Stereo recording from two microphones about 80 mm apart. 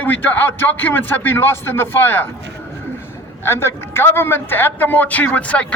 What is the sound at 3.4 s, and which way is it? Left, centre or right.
A man's voice, left.